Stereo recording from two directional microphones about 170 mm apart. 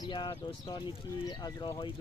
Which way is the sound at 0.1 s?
30° left (ahead or behind).